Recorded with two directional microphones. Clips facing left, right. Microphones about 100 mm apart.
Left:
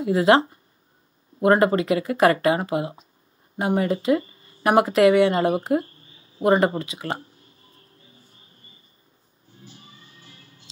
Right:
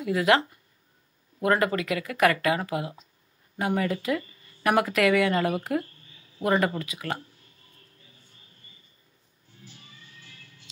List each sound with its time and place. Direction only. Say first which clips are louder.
0.0 s speech: left 5 dB; 30° left (ahead or behind)
3.5 s a sound: left 4 dB; 30° left (ahead or behind)
9.5 s music: left 4 dB; 30° left (ahead or behind)